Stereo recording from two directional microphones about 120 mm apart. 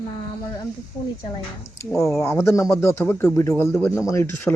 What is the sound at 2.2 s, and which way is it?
Speech, 20° left (ahead or behind).